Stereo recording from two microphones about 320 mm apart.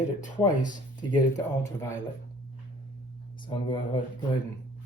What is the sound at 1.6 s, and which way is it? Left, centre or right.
Speech, centre.